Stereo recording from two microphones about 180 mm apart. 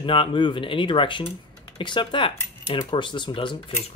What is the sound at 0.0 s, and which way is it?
Speech, 30° left (ahead or behind).